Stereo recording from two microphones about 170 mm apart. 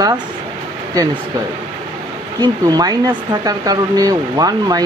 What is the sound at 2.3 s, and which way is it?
Speech, 25° right (ahead or behind).